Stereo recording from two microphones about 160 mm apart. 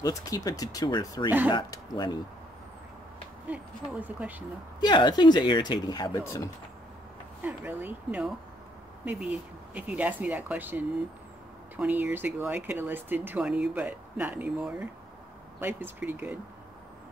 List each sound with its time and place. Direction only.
0.0 s speech: 25° left (ahead or behind)
3.4 s speech: 10° right (ahead or behind)
4.7 s speech: 30° left (ahead or behind)
7.4 s speech: 10° right (ahead or behind)